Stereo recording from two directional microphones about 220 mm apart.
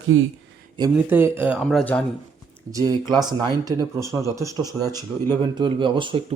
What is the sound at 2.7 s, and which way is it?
Speech, 15° right (ahead or behind).